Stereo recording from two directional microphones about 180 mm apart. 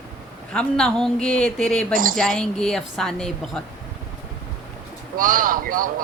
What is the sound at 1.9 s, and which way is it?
Speech, 50° right (ahead or behind).